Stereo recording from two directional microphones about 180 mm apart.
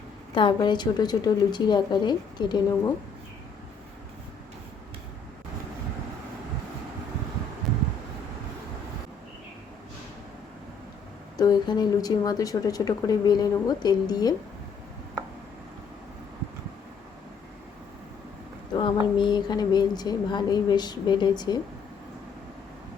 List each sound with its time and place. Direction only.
0.3 s a woman's voice: 25° left (ahead or behind)
11.3 s a woman's voice: 25° left (ahead or behind)
18.8 s a woman's voice: 25° left (ahead or behind)